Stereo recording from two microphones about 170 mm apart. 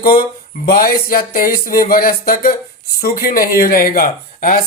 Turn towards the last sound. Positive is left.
turn(degrees=55)  # may be behind; listen again after turning